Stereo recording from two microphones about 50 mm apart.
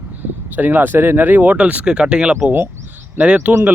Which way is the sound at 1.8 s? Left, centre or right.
Centre.